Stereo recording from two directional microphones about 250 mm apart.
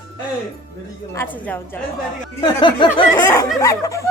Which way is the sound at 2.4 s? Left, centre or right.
Centre.